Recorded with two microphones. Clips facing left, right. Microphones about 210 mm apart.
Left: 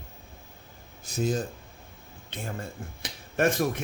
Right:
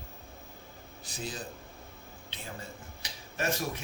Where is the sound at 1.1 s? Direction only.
45° left (ahead or behind).